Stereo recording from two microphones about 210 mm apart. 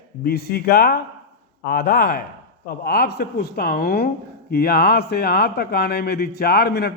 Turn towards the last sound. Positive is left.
turn(degrees=45)  # may be behind; listen again after turning